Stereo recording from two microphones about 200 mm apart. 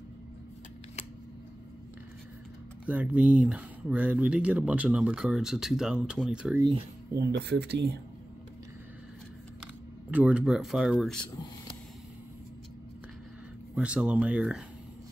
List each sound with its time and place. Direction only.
2.9 s speech: 10° right (ahead or behind)
7.2 s speech: 50° right (ahead or behind)
10.1 s speech: 5° right (ahead or behind)
13.7 s speech: 5° right (ahead or behind)